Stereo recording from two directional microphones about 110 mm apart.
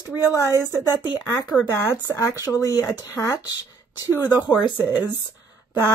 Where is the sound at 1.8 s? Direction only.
20° left (ahead or behind).